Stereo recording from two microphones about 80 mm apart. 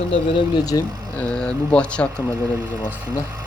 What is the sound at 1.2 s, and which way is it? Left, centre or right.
Speech, centre.